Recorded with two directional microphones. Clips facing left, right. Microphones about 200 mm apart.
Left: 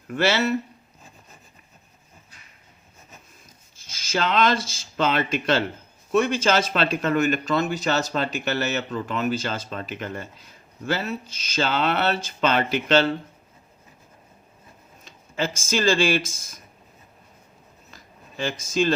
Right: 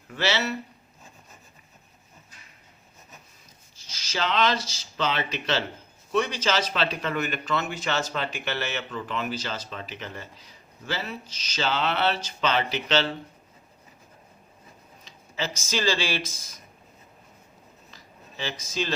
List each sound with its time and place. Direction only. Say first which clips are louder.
0.1 s speech: left 5 dB; 50° left (ahead or behind)
3.8 s speech: left 4 dB; 50° left (ahead or behind)
15.0 s speech: left 5 dB; 50° left (ahead or behind)
17.9 s a sound: left 5 dB; 50° left (ahead or behind)